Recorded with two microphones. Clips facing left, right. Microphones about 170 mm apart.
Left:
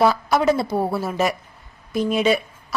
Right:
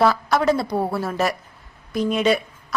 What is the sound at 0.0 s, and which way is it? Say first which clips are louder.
A woman's voice: left 1 dB; 5° left (ahead or behind).